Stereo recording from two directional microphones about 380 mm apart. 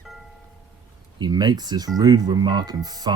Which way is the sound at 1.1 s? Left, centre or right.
Centre.